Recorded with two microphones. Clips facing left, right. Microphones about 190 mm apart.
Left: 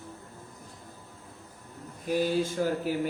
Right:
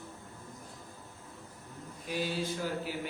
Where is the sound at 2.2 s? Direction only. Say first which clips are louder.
Left 7 dB; 45° left (ahead or behind).